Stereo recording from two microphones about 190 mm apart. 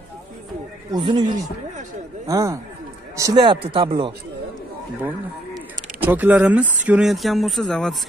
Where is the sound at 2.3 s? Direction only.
20° right (ahead or behind).